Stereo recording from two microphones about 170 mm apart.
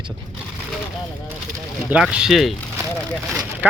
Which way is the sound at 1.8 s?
5° right (ahead or behind).